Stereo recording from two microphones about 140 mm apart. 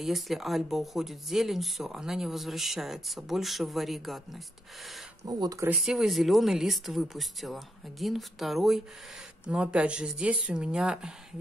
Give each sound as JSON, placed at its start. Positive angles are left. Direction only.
{"t": 0.0, "sound": "speech", "side_deg": 0}
{"t": 5.2, "sound": "speech", "side_deg": -25}
{"t": 5.8, "sound": "speech", "side_deg": 0}